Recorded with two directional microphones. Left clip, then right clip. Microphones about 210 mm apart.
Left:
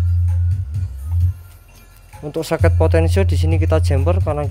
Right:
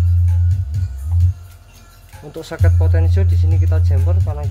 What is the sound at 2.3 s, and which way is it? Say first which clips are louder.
Speech: left 8 dB; 30° left (ahead or behind).